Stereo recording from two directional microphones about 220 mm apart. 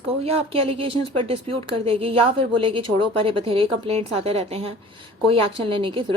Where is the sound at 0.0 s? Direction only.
25° right (ahead or behind).